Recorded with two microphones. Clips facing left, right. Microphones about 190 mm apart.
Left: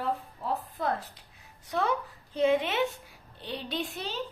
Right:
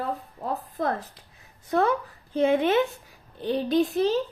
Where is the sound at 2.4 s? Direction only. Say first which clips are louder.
Right 4 dB; 50° right (ahead or behind).